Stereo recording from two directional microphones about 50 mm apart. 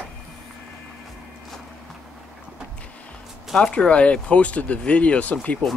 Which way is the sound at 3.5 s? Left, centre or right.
Centre.